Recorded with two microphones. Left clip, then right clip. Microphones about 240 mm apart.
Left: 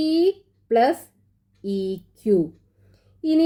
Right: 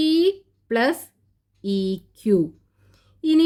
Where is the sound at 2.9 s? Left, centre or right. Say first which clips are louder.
Right 1 dB; right.